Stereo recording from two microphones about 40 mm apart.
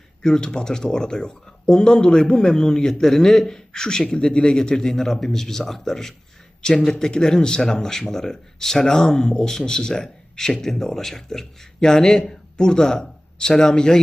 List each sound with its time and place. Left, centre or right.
0.2 s speech: centre
6.6 s speech: left